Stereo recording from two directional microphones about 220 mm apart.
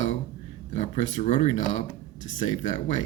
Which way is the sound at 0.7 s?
30° left (ahead or behind).